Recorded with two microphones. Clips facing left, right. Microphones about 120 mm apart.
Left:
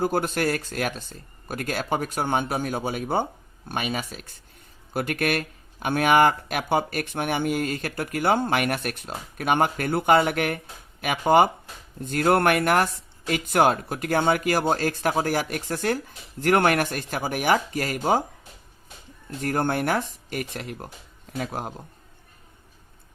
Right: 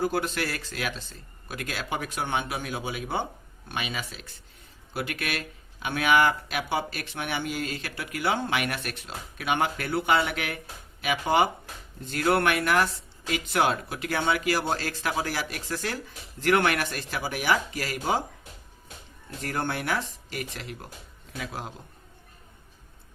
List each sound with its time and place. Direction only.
0.0 s speech: 45° left (ahead or behind)
19.4 s speech: 45° left (ahead or behind)